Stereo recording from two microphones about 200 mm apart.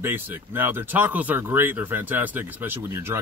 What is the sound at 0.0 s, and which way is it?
Speech, 10° right (ahead or behind).